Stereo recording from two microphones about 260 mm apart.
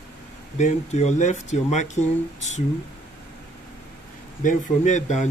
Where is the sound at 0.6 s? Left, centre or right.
Left.